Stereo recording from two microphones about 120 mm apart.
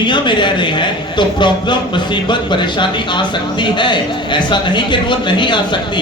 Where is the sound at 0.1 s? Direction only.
40° left (ahead or behind).